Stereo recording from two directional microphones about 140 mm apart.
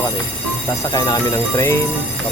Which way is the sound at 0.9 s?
30° left (ahead or behind).